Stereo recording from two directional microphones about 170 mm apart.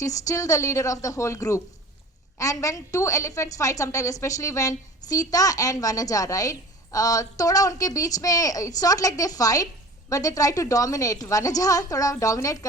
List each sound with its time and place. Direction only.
0.0 s a woman's voice: 20° left (ahead or behind)